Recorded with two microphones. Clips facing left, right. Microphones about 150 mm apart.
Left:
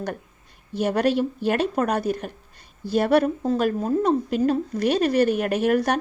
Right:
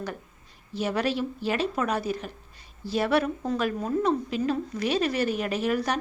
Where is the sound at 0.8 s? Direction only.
45° left (ahead or behind).